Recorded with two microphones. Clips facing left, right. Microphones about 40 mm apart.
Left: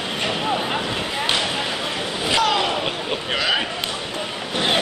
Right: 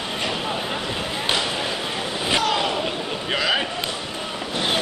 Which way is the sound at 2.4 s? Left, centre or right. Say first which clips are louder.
Left 4 dB; left.